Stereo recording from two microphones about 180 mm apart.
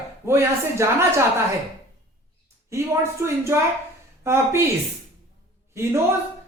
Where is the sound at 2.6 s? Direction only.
15° right (ahead or behind).